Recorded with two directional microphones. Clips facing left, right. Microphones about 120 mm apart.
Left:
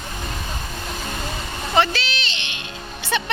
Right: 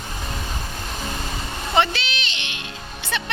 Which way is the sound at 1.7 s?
20° right (ahead or behind).